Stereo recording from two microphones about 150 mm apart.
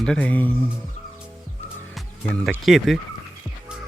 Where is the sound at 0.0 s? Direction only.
5° left (ahead or behind).